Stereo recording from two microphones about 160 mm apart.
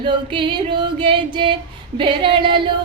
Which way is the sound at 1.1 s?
30° right (ahead or behind).